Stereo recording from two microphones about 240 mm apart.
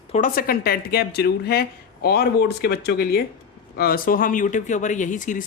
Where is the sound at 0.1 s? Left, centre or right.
Left.